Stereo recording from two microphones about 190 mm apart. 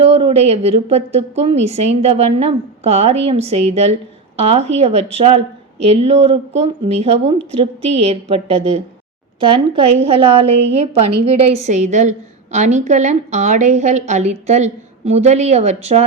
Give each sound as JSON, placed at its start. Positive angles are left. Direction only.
{"t": 0.0, "sound": "a woman's voice", "side_deg": -30}